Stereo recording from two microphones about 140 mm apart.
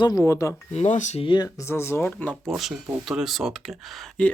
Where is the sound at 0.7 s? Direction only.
55° left (ahead or behind).